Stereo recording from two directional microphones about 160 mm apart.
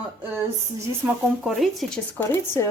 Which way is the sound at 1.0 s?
Centre (ahead or behind).